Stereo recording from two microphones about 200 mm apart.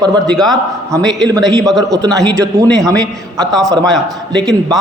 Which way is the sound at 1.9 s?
15° right (ahead or behind).